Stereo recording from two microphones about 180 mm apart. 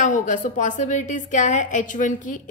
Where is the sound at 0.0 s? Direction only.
45° left (ahead or behind).